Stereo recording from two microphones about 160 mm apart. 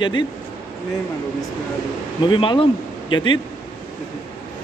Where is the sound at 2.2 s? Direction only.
30° left (ahead or behind).